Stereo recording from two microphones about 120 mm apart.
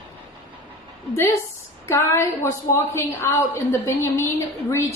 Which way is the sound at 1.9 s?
20° left (ahead or behind).